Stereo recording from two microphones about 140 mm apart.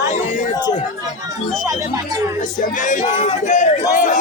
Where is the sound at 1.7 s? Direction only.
25° right (ahead or behind).